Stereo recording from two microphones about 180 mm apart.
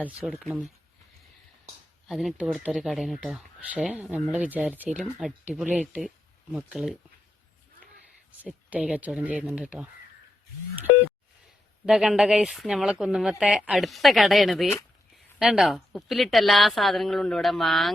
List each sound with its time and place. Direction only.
0.0 s speech: 5° right (ahead or behind)
2.0 s speech: centre (ahead or behind)
8.4 s speech: 5° right (ahead or behind)
11.9 s speech: 5° right (ahead or behind)